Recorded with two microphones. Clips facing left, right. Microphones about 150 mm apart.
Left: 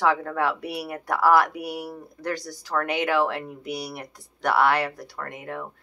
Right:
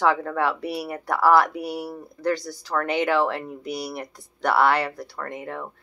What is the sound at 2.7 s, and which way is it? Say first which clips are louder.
Speech: right 2 dB; 30° right (ahead or behind).